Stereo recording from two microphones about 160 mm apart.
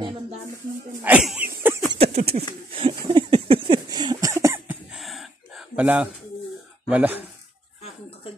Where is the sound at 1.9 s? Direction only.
35° right (ahead or behind); by 4.7 s 20° right (ahead or behind).